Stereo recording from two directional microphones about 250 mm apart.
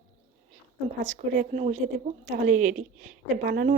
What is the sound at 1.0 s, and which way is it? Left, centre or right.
A woman's voice, right.